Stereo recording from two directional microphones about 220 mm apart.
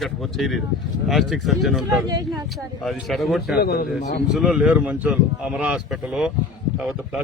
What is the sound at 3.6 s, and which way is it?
Speech, 45° left (ahead or behind).